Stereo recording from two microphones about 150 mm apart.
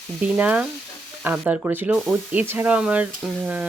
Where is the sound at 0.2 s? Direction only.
10° right (ahead or behind).